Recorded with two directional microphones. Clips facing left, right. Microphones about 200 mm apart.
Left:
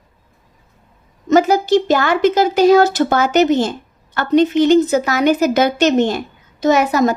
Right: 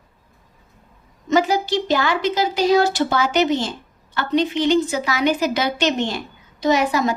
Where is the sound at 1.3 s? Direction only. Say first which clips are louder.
Left 6 dB; 45° left (ahead or behind).